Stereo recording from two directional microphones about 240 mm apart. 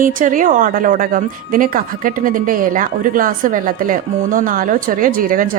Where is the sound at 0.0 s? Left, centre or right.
Right.